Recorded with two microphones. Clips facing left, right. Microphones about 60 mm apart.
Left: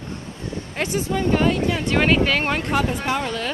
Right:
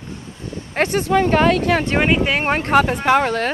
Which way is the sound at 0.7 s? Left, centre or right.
Right.